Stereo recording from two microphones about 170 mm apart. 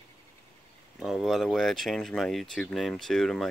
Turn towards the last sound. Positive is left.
turn(degrees=0)  # may be behind; listen again after turning